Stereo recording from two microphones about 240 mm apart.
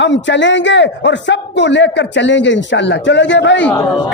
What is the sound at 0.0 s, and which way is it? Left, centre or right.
A man's voice, left.